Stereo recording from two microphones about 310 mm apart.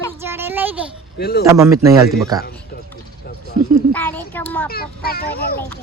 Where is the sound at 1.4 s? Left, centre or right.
Centre.